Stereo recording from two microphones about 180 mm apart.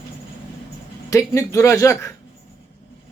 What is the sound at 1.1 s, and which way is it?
Speech, 15° left (ahead or behind).